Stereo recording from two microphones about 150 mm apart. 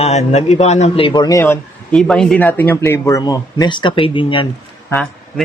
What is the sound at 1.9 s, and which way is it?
Speech, 5° left (ahead or behind).